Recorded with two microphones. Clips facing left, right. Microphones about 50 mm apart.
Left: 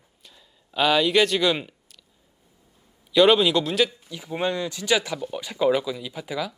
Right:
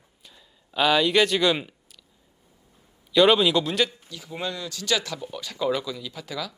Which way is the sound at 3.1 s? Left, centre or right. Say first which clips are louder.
Left 1 dB; centre.